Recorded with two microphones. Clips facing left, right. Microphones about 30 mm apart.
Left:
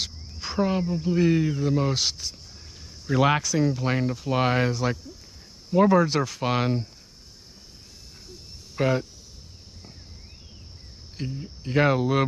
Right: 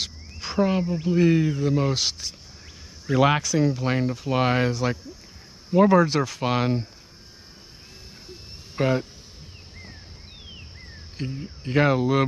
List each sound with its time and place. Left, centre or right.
0.0 s cricket: centre
1.1 s speech: centre
5.7 s speech: centre
5.9 s speech: centre
8.7 s speech: centre
11.2 s speech: right
11.8 s speech: centre